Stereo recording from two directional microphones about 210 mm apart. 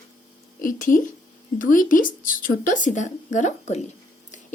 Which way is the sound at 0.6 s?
40° left (ahead or behind).